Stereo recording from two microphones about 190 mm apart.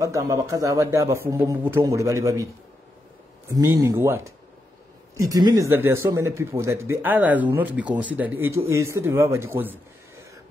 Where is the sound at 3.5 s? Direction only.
15° right (ahead or behind).